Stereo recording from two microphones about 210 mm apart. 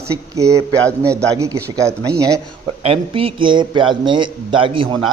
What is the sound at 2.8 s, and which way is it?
A man's voice, 25° right (ahead or behind).